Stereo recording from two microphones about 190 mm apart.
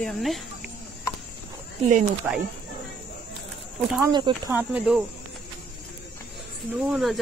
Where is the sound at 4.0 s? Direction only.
25° right (ahead or behind).